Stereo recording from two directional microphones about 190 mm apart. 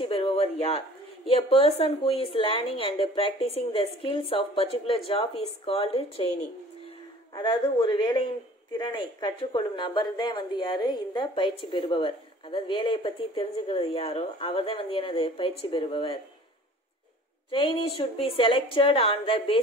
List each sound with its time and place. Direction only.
0.0 s speech: 30° left (ahead or behind)
7.3 s speech: 25° left (ahead or behind)
17.5 s speech: 30° left (ahead or behind)